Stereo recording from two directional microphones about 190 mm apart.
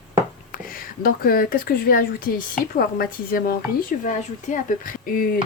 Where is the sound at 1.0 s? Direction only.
50° left (ahead or behind).